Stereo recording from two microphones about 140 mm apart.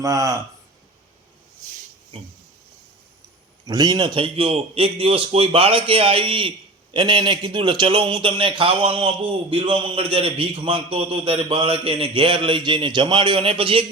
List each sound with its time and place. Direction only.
0.0 s speech: 25° right (ahead or behind)
3.7 s a man's voice: 30° right (ahead or behind)